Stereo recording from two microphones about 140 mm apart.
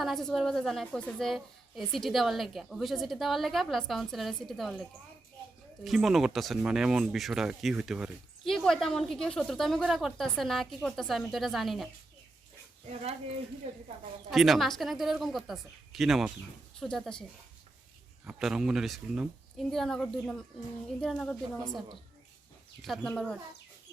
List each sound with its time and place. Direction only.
0.0 s a woman's voice: centre (ahead or behind)
12.9 s speech: 50° right (ahead or behind)
14.3 s a woman's voice: centre (ahead or behind)
18.3 s a woman's voice: 5° right (ahead or behind)